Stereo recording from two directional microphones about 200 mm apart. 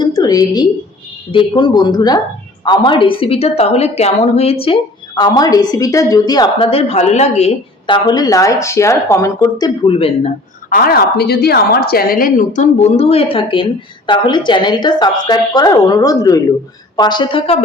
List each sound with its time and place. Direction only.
0.0 s a sound: 20° left (ahead or behind)
1.3 s a woman's voice: 25° left (ahead or behind)
10.7 s a woman's voice: 45° left (ahead or behind); by 17.6 s 25° left (ahead or behind)